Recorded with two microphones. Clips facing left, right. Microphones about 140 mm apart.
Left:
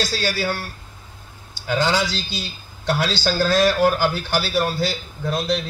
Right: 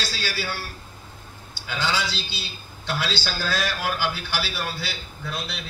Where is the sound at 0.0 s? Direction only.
45° left (ahead or behind).